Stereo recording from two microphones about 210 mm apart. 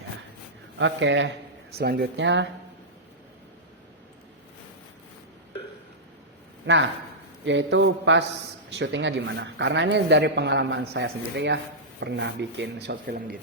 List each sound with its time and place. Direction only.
0.8 s speech: 60° right (ahead or behind)
6.7 s speech: 60° right (ahead or behind); by 13.4 s 45° right (ahead or behind)